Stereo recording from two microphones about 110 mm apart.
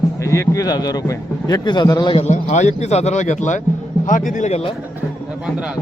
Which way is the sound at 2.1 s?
90° left.